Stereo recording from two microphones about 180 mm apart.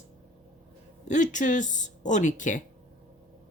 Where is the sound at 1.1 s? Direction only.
45° left (ahead or behind).